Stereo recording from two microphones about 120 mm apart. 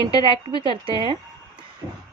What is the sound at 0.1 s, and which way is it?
A woman's voice, 45° right (ahead or behind).